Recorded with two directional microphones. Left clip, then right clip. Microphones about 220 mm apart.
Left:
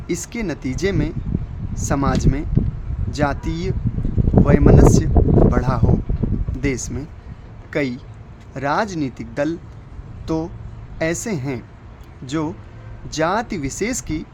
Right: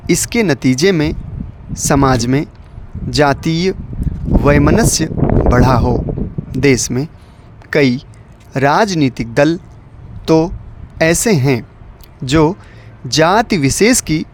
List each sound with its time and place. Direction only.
0.1 s speech: 45° right (ahead or behind)